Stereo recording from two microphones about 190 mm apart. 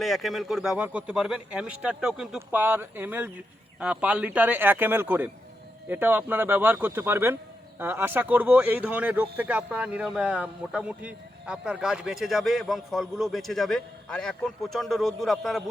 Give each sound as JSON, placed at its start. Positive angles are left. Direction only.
{"t": 0.0, "sound": "speech", "side_deg": 0}